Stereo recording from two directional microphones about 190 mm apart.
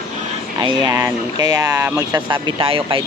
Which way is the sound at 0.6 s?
20° right (ahead or behind).